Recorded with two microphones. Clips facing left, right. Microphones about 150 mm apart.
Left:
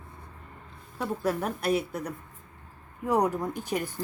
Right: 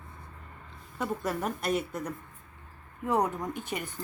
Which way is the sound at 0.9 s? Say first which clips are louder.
Left 3 dB; centre (ahead or behind).